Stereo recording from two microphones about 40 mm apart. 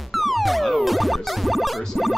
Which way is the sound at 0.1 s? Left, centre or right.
Centre.